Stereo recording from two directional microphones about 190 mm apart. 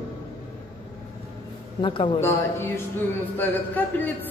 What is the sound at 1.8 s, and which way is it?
Speech, 25° left (ahead or behind).